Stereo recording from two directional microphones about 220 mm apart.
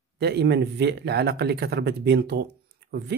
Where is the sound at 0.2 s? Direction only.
50° right (ahead or behind).